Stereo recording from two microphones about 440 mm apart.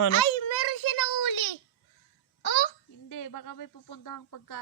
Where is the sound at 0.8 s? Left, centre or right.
Left.